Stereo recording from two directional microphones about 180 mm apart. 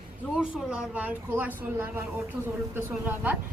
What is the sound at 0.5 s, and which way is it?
A woman's voice, 5° right (ahead or behind).